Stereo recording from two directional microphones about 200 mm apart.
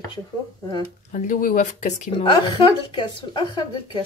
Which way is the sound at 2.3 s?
25° left (ahead or behind).